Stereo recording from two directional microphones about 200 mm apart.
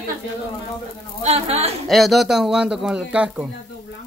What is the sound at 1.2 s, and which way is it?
Speech, 30° right (ahead or behind).